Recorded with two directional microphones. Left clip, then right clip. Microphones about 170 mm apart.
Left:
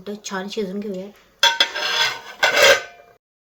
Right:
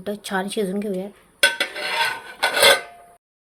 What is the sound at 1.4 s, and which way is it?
Dishes, 30° left (ahead or behind).